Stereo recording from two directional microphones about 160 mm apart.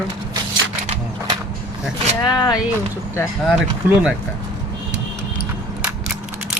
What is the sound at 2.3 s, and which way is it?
Speech, 25° left (ahead or behind).